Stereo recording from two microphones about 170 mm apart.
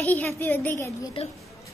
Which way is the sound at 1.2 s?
35° left (ahead or behind).